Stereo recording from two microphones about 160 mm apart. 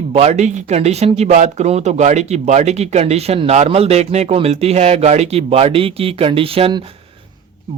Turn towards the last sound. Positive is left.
turn(degrees=-35)  # may be behind; listen again after turning